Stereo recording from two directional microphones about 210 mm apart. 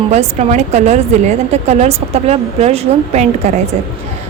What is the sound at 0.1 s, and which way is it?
A woman's voice, 30° right (ahead or behind).